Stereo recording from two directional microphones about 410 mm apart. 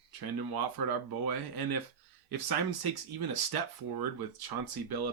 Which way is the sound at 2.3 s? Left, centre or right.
Right.